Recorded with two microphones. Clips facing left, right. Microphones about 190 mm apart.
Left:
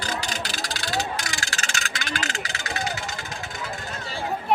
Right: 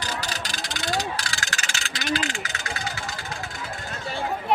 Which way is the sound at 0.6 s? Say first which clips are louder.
Right 1 dB; 20° right (ahead or behind).